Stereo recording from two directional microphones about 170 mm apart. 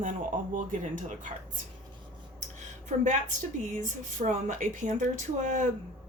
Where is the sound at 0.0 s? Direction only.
50° right (ahead or behind).